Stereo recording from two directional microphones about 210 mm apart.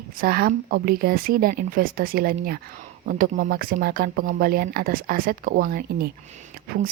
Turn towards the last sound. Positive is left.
turn(degrees=-45)  # may be behind; listen again after turning